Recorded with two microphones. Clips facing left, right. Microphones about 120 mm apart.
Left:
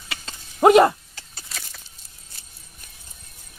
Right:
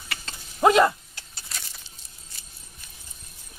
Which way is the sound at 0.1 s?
15° left (ahead or behind).